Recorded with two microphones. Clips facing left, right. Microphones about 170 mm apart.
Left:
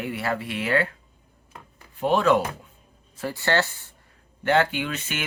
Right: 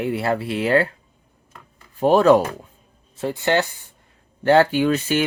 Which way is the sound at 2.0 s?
40° right (ahead or behind).